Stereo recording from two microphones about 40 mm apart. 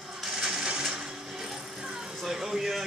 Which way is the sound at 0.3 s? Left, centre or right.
Centre.